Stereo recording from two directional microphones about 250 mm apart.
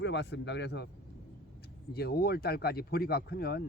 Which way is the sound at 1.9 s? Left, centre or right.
Left.